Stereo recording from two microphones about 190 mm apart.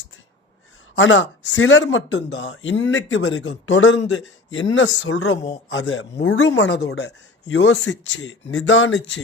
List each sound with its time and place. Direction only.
0.9 s speech: 90° left
4.7 s speech: 90° left
5.7 s speech: 75° left (ahead or behind)